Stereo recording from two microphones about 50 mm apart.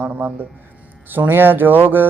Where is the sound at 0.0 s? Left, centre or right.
Right.